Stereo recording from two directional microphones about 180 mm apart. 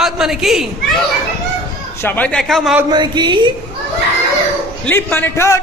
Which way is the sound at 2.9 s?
25° right (ahead or behind).